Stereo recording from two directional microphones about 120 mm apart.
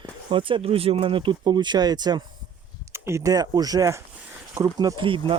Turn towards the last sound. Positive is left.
turn(degrees=-40)  # may be behind; listen again after turning